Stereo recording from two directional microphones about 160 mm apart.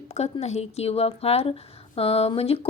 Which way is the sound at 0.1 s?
40° left (ahead or behind).